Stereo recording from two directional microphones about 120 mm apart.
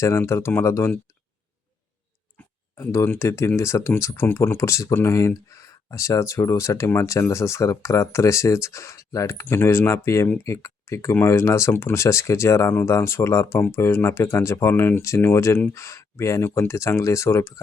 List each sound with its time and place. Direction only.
0.0 s speech: 25° left (ahead or behind)
2.7 s speech: 20° left (ahead or behind)